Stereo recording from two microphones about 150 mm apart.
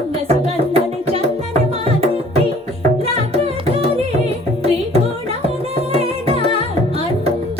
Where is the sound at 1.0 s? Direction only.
40° right (ahead or behind).